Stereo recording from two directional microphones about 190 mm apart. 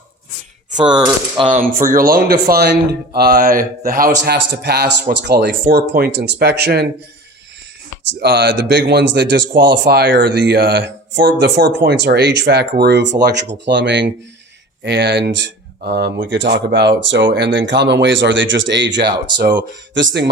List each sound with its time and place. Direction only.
0.9 s speech: 20° right (ahead or behind)
1.5 s a man's voice: 45° right (ahead or behind)
8.2 s a man's voice: 60° right (ahead or behind)